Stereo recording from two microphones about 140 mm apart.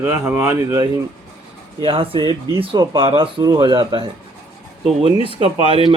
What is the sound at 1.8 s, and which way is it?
Speech, 40° right (ahead or behind).